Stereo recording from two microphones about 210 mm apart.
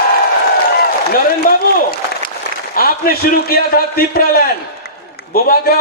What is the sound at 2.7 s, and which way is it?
A man's voice, 45° left (ahead or behind).